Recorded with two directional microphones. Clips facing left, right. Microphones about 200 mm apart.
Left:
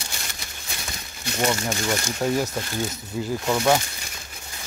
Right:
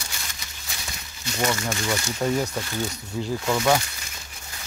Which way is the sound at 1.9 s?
5° left (ahead or behind).